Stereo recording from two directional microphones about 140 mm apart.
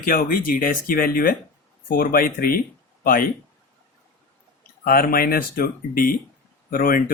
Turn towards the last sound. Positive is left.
turn(degrees=90)